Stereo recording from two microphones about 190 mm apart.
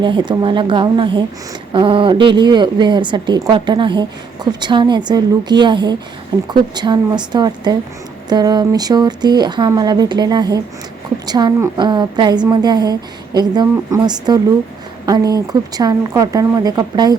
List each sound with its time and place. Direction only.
0.0 s a woman's voice: 25° right (ahead or behind)